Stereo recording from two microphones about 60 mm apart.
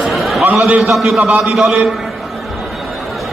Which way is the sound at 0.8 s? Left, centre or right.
Centre.